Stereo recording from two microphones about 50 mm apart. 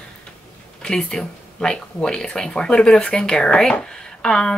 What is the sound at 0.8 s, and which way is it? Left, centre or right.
Speech, centre.